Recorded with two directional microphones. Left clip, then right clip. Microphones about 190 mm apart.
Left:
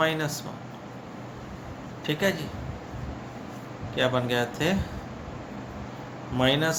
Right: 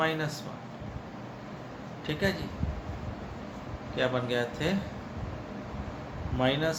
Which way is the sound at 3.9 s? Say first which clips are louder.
Left 4 dB; 30° left (ahead or behind).